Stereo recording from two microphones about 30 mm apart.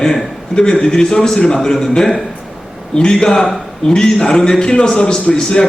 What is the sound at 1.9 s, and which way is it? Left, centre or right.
A man's voice, left.